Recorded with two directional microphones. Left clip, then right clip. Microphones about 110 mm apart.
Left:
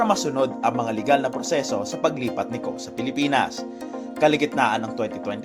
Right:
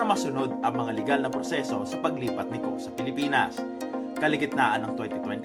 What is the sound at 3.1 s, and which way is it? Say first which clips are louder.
Speech: left 4 dB; 85° left.